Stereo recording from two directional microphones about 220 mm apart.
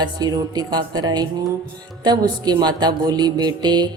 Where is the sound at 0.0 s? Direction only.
20° right (ahead or behind).